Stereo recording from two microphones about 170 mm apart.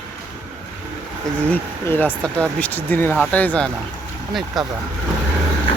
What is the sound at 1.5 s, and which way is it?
Speech, 10° left (ahead or behind).